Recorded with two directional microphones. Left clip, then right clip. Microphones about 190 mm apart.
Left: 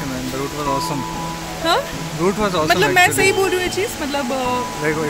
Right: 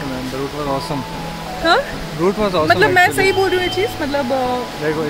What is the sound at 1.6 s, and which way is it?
Speech, 40° right (ahead or behind).